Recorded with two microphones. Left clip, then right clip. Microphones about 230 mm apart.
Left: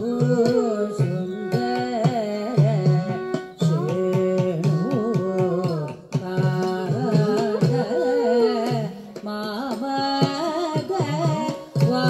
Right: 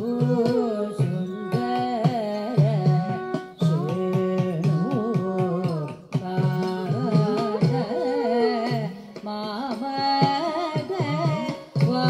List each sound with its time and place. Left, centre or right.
0.2 s music: left
9.9 s carnatic music: left
11.8 s music: left